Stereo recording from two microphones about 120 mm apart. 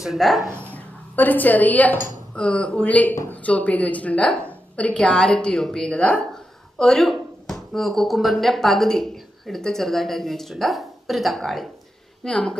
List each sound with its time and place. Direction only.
0.0 s speech: centre (ahead or behind)
0.7 s a sound: 15° left (ahead or behind)
2.3 s a woman's voice: 10° left (ahead or behind)